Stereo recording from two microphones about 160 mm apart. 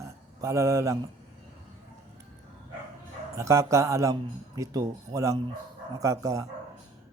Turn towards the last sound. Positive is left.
turn(degrees=-20)  # may be behind; listen again after turning